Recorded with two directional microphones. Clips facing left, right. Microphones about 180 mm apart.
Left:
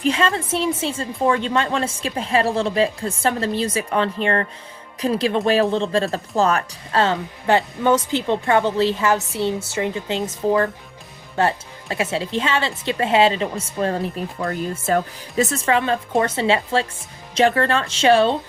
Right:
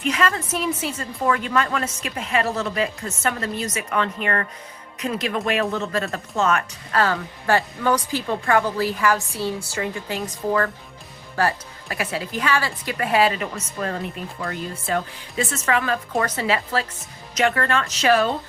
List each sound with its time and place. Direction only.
0.0 s a woman's voice: 30° left (ahead or behind)